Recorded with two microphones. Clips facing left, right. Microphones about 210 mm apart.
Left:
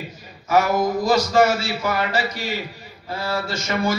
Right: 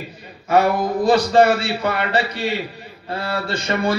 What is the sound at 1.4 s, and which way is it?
A man's voice, 60° right (ahead or behind).